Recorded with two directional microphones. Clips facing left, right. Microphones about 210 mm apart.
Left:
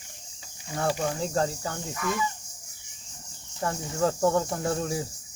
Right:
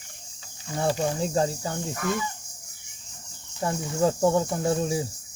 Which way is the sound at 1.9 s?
50° right (ahead or behind).